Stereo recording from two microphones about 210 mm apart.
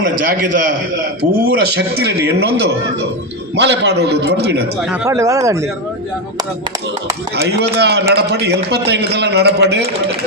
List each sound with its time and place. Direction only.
0.0 s a man's voice: 40° right (ahead or behind)
1.5 s a man's voice: 50° right (ahead or behind)
5.0 s speech: 15° right (ahead or behind)
7.3 s a man's voice: 50° right (ahead or behind)